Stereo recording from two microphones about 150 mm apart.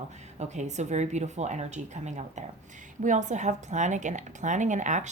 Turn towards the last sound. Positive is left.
turn(degrees=-55)  # may be behind; listen again after turning